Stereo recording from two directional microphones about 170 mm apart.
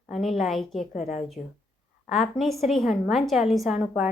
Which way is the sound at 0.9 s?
45° left (ahead or behind).